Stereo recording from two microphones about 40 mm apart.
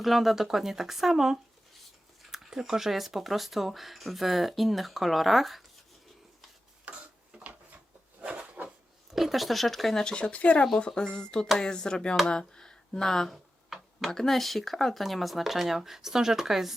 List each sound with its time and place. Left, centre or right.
0.0 s speech: centre
6.9 s a sound: right
8.2 s a sound: right
9.1 s speech: centre
10.0 s speech: left
10.8 s speech: left
13.3 s tick-tock: centre
14.1 s speech: centre